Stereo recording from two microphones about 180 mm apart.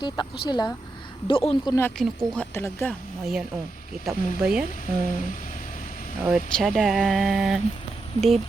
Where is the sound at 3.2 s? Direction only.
5° right (ahead or behind).